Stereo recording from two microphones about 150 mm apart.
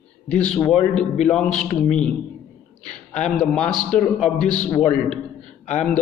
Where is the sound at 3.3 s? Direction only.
5° left (ahead or behind).